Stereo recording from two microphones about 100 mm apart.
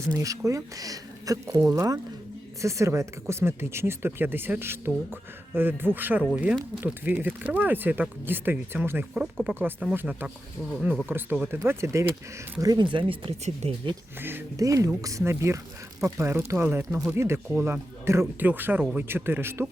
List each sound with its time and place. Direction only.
0.1 s speech: 35° right (ahead or behind)
9.2 s speech: 10° right (ahead or behind)
9.9 s speech: 20° right (ahead or behind); by 12.8 s 40° right (ahead or behind)
12.8 s speech: 55° right (ahead or behind)
13.4 s speech: 90° right
14.2 s speech: 20° right (ahead or behind)
14.5 s speech: 35° right (ahead or behind)